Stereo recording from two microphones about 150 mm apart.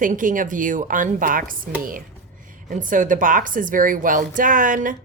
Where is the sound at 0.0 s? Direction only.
65° right (ahead or behind).